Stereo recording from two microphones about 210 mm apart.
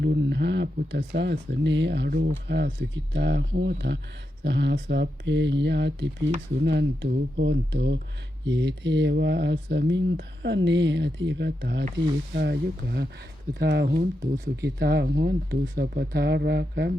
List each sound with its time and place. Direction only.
0.0 s speech: 50° right (ahead or behind)
14.8 s speech: 50° right (ahead or behind)